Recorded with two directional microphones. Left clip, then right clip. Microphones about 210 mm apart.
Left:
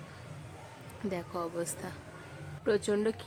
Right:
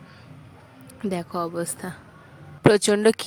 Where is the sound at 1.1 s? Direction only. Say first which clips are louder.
Right 8 dB; 25° right (ahead or behind).